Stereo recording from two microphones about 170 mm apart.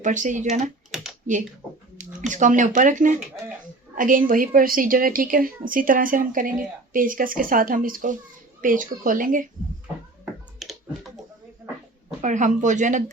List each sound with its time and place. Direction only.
0.0 s speech: 45° right (ahead or behind)
0.9 s computer keyboard: centre (ahead or behind)
2.0 s a woman's voice: 50° right (ahead or behind)
10.6 s computer keyboard: centre (ahead or behind)
12.2 s speech: 45° right (ahead or behind)